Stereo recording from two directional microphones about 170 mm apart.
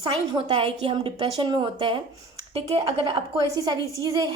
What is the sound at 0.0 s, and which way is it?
A woman's voice, 25° right (ahead or behind).